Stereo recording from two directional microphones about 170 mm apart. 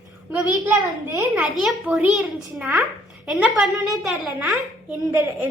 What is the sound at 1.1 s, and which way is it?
A child's voice, 10° right (ahead or behind).